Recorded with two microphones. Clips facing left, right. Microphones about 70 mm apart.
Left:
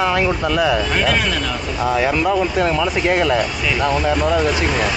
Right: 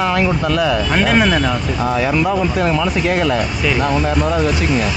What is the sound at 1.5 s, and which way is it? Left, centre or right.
Speech, centre.